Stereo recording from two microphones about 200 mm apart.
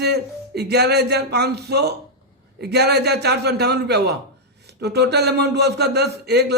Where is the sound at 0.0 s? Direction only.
55° right (ahead or behind).